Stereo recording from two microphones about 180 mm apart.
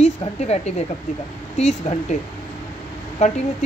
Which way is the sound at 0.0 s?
35° left (ahead or behind).